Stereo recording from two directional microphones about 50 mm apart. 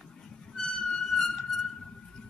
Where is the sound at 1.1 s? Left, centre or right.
Centre.